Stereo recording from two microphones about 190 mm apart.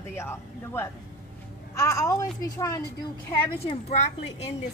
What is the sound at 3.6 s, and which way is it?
Speech, 30° left (ahead or behind).